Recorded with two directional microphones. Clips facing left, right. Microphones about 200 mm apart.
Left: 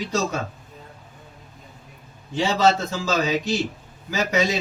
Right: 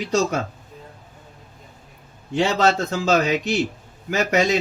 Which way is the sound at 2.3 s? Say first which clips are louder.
Right 1 dB; 60° right (ahead or behind).